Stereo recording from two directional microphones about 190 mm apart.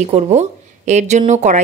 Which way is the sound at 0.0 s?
35° right (ahead or behind).